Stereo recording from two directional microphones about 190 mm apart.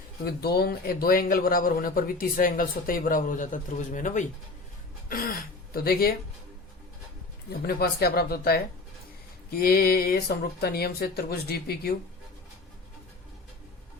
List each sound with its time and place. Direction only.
0.3 s a man's voice: 55° left (ahead or behind)
7.7 s a man's voice: 55° left (ahead or behind)